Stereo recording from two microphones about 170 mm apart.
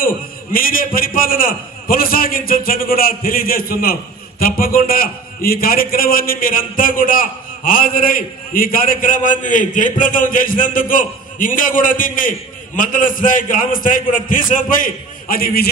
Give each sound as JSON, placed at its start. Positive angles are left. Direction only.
{"t": 0.0, "sound": "a man's voice", "side_deg": 55}